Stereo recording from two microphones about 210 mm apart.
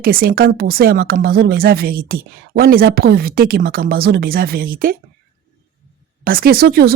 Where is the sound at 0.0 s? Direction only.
45° right (ahead or behind).